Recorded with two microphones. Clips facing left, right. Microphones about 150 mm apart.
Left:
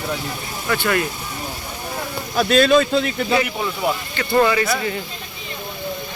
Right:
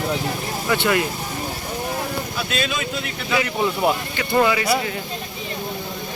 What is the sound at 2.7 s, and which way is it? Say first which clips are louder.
Speech: left 12 dB; 70° left (ahead or behind).